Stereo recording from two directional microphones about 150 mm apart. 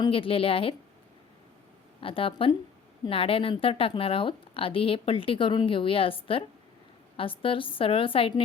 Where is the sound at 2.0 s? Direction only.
35° left (ahead or behind).